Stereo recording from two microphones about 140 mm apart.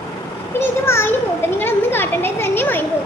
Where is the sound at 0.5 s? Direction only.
20° left (ahead or behind).